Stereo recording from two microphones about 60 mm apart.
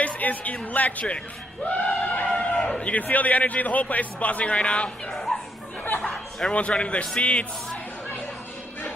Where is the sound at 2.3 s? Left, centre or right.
Centre.